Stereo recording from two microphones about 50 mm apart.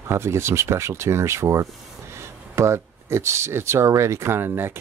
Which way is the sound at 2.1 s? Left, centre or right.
Right.